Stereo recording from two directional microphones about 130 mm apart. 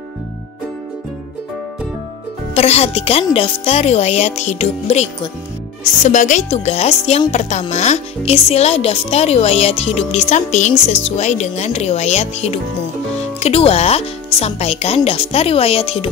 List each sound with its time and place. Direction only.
2.5 s a woman's voice: 55° left (ahead or behind)
6.0 s a woman's voice: 70° left (ahead or behind); by 16.1 s 45° left (ahead or behind)